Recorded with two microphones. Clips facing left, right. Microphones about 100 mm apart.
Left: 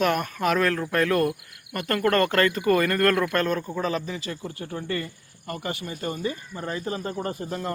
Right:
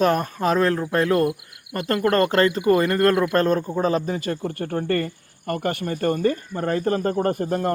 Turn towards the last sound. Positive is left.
turn(degrees=-50)  # may be behind; listen again after turning